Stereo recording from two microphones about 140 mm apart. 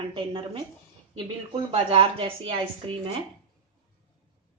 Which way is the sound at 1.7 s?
40° right (ahead or behind).